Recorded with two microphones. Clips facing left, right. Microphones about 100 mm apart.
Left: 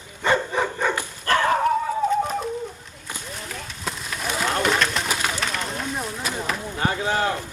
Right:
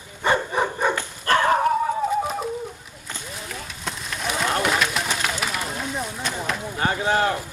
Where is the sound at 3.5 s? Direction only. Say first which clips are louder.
Left 1 dB; centre (ahead or behind).